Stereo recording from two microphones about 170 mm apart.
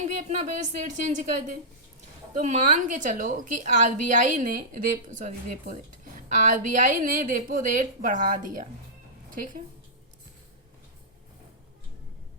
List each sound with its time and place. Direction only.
0.2 s a woman's voice: 45° right (ahead or behind)